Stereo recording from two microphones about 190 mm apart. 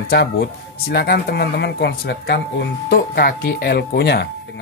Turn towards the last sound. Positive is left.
turn(degrees=60)  # may be behind; listen again after turning